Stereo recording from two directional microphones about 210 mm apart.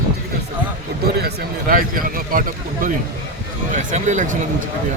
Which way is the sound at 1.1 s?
50° right (ahead or behind).